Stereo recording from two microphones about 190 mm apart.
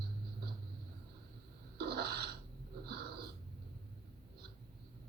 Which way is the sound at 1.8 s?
55° right (ahead or behind).